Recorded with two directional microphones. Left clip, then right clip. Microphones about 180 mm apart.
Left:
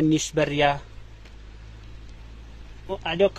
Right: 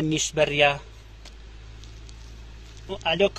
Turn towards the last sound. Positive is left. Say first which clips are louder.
# even
turn(degrees=30)  # may be behind; listen again after turning